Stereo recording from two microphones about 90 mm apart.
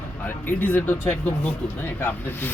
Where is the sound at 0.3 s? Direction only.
20° left (ahead or behind).